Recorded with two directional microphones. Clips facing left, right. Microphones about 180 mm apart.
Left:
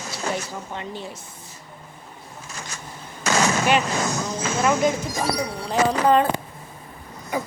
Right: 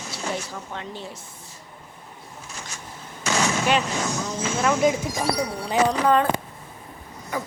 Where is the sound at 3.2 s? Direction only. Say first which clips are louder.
Left 3 dB; 40° left (ahead or behind).